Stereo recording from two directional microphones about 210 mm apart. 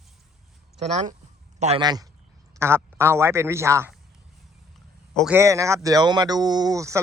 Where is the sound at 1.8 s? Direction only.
20° right (ahead or behind).